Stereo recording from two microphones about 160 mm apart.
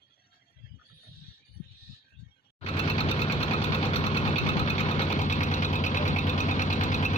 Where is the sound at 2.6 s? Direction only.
35° left (ahead or behind).